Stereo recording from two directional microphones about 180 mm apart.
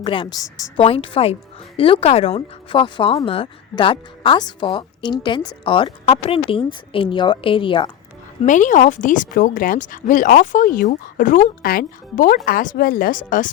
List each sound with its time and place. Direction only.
0.0 s speech: 30° left (ahead or behind)
0.9 s speech: 30° left (ahead or behind)
8.4 s speech: 45° left (ahead or behind)